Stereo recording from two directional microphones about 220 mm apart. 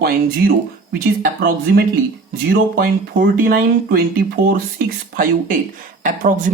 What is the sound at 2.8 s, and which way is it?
Speech, 40° right (ahead or behind).